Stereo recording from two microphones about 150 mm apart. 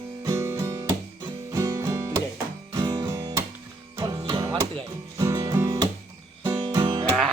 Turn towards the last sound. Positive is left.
turn(degrees=-30)  # may be behind; listen again after turning